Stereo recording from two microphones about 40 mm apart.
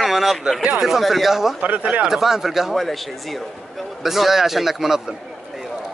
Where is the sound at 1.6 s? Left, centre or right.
Right.